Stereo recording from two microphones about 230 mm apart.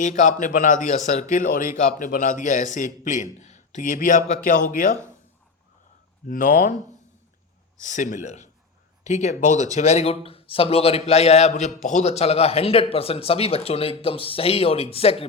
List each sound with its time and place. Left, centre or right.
0.0 s a man's voice: left
6.2 s a man's voice: left
7.8 s a man's voice: left